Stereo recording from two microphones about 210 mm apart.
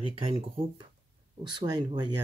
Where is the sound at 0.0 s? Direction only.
25° right (ahead or behind).